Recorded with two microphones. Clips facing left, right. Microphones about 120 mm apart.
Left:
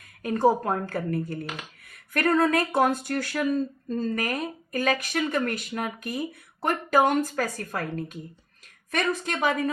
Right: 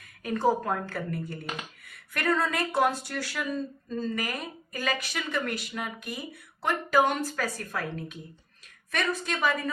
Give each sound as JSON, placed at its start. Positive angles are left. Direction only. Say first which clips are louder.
{"t": 0.2, "sound": "speech", "louder": "left 4 dB", "side_deg": 40}